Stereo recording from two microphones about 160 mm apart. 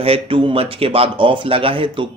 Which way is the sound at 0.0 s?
35° right (ahead or behind).